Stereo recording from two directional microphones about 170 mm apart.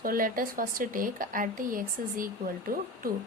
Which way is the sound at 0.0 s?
55° right (ahead or behind).